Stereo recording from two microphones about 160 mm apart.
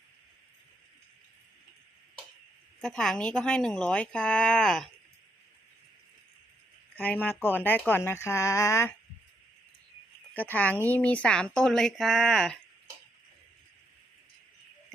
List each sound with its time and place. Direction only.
2.8 s speech: 5° left (ahead or behind)
6.9 s speech: 10° left (ahead or behind)
10.3 s speech: 10° left (ahead or behind)